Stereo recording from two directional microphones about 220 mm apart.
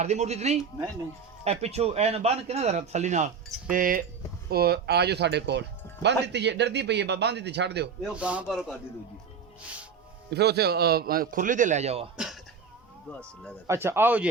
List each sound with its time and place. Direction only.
0.0 s speech: 30° right (ahead or behind); by 7.9 s 50° right (ahead or behind)
8.0 s a man's voice: 5° right (ahead or behind)
10.2 s speech: 50° right (ahead or behind); by 12.0 s 30° right (ahead or behind)
12.1 s a man's voice: 5° right (ahead or behind)
13.7 s speech: 10° right (ahead or behind)